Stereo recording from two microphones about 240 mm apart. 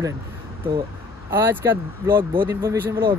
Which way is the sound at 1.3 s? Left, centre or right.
Centre.